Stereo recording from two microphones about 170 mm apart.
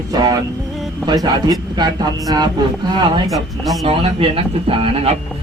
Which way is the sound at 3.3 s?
Centre (ahead or behind).